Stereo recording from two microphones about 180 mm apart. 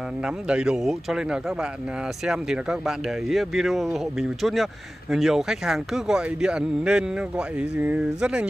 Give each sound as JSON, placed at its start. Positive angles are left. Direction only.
{"t": 0.2, "sound": "speech", "side_deg": -5}